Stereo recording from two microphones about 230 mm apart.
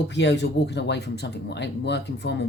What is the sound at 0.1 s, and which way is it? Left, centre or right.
Speech, left.